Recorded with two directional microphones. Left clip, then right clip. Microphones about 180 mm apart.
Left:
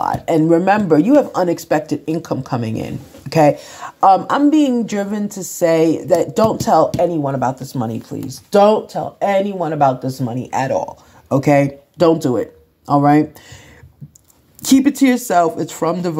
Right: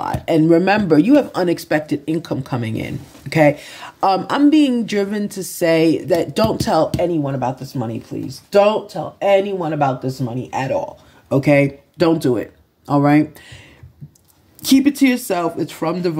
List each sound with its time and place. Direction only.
0.2 s speech: 15° right (ahead or behind)
1.0 s speech: 15° right (ahead or behind)
1.9 s speech: centre (ahead or behind)
7.3 s speech: 15° left (ahead or behind)
14.9 s speech: 10° left (ahead or behind)